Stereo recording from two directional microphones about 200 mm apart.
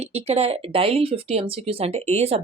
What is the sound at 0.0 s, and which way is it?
Speech, 30° right (ahead or behind).